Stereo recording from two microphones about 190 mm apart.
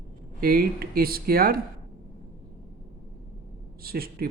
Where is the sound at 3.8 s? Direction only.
50° right (ahead or behind).